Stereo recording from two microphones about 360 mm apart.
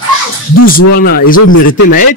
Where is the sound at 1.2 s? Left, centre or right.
Left.